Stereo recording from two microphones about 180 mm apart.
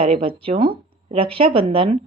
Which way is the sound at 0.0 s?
30° right (ahead or behind).